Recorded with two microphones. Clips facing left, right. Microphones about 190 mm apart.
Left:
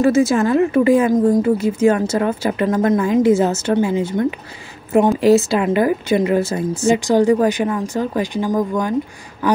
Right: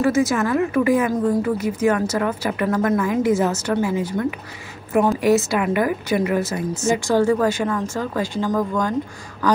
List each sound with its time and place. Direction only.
0.0 s a woman's voice: 25° left (ahead or behind)
6.9 s speech: 15° left (ahead or behind)